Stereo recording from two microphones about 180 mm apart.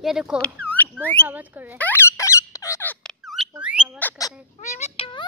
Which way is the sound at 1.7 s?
10° left (ahead or behind).